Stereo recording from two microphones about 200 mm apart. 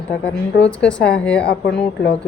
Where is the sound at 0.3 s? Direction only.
5° left (ahead or behind).